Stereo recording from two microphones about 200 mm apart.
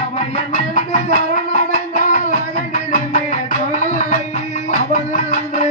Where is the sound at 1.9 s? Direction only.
40° left (ahead or behind).